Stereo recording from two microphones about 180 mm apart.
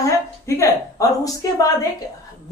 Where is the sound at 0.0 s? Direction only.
15° left (ahead or behind).